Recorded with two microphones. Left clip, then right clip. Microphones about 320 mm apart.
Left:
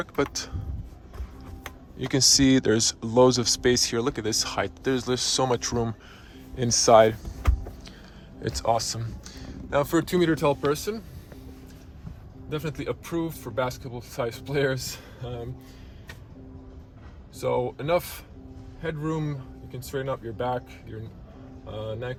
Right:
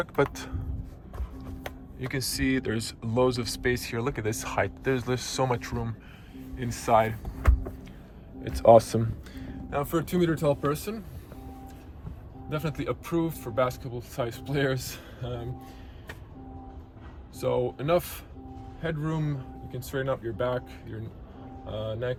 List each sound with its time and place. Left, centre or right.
0.0 s speech: centre
1.6 s speech: centre
8.4 s speech: centre
9.9 s speech: left
12.5 s speech: centre
17.4 s speech: centre
21.7 s speech: centre